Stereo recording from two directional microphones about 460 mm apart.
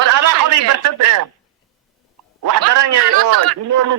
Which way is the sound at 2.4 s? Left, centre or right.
Right.